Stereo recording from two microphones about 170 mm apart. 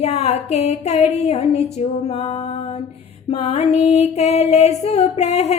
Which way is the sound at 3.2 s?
40° left (ahead or behind).